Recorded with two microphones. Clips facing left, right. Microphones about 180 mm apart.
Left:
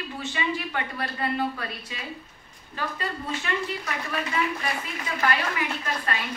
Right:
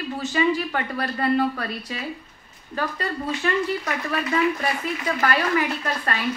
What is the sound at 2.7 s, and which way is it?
Speech, 45° right (ahead or behind).